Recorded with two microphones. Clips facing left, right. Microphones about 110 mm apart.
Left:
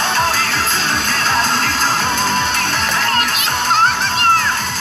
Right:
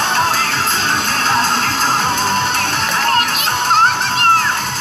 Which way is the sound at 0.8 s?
40° right (ahead or behind).